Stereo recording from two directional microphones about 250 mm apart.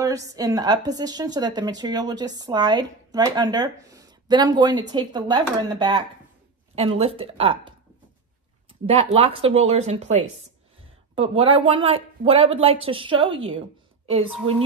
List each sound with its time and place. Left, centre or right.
0.0 s a woman's voice: centre
8.8 s speech: right